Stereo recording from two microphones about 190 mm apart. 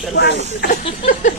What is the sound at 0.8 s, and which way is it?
Speech, 40° left (ahead or behind).